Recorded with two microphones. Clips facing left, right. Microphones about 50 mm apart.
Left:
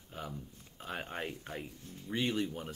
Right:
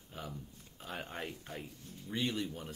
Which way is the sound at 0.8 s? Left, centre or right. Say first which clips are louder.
Left 3 dB; left.